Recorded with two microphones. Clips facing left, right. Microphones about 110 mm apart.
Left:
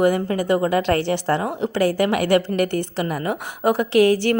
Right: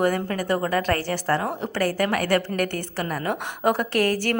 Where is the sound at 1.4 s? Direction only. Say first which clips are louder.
Left 4 dB; 10° left (ahead or behind).